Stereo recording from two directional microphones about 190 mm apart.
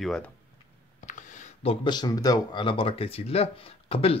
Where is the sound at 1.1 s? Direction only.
40° left (ahead or behind).